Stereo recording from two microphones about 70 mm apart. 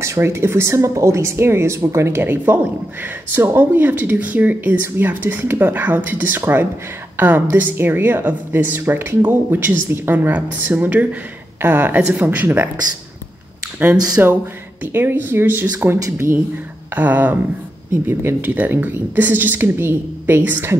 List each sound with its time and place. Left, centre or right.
0.0 s a woman's voice: right
13.9 s speech: right
14.2 s a woman's voice: right